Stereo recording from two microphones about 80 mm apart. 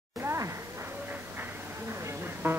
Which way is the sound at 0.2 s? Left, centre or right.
Right.